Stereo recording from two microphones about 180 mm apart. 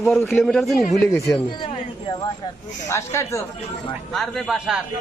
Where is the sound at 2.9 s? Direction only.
15° left (ahead or behind).